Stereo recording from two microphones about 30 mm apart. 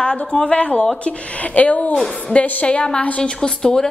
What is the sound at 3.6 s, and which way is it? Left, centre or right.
Speech, left.